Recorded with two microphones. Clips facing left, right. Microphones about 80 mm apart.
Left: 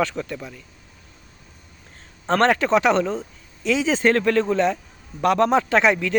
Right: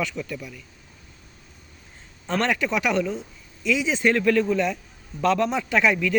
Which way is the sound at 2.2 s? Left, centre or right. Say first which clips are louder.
Left 6 dB; left.